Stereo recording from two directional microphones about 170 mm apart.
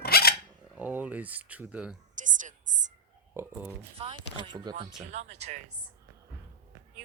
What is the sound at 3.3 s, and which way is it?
Speech, 10° right (ahead or behind).